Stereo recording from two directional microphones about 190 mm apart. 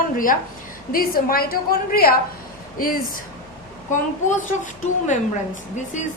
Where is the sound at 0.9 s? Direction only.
50° left (ahead or behind).